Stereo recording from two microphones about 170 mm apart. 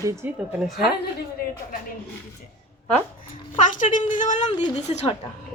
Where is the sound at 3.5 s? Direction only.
50° left (ahead or behind).